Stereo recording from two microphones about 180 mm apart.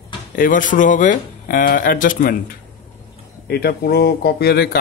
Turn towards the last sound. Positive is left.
turn(degrees=60)  # may be behind; listen again after turning